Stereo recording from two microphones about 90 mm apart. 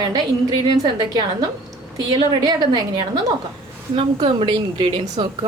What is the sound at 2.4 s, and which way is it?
Speech, 55° right (ahead or behind).